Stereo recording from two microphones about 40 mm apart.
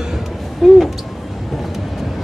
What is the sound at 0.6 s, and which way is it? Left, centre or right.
Owl, centre.